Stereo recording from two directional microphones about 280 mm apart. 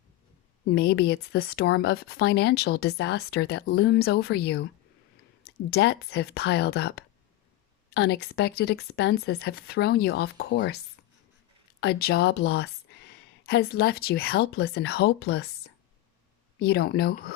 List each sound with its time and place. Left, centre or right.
0.6 s speech: left
11.8 s speech: left